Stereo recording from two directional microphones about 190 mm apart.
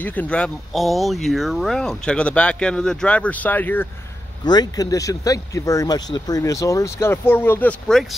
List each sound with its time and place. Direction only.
0.0 s speech: 10° left (ahead or behind)
4.5 s speech: 20° left (ahead or behind)